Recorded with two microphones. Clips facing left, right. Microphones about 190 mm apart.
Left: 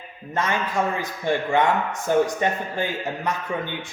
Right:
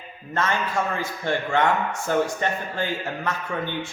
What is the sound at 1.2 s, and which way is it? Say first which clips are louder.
A man's voice: left 2 dB; 15° left (ahead or behind).